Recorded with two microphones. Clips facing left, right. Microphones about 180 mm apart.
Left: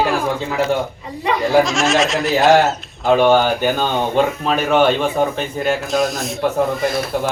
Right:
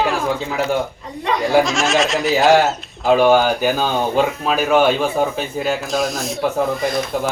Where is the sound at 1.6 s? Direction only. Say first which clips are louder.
Left 1 dB; centre (ahead or behind).